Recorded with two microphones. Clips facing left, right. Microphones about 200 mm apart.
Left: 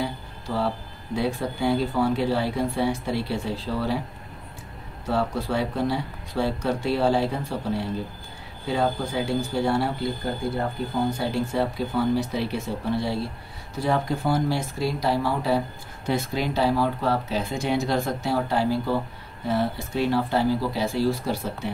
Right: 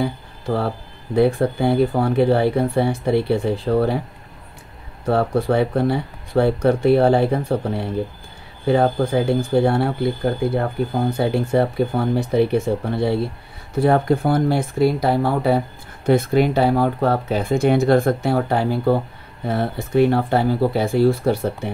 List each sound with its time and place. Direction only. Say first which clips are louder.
0.0 s speech: right 6 dB; 55° right (ahead or behind)
5.0 s speech: right 7 dB; 55° right (ahead or behind)